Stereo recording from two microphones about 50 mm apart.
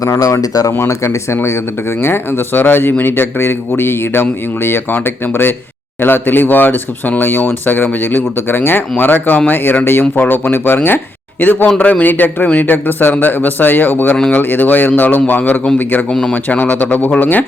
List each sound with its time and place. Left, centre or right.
0.0 s speech: left
0.9 s speech: left